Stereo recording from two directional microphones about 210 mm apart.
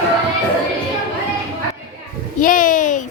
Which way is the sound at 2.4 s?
40° left (ahead or behind).